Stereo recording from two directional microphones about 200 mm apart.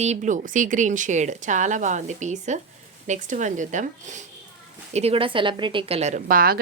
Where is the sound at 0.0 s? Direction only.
35° right (ahead or behind).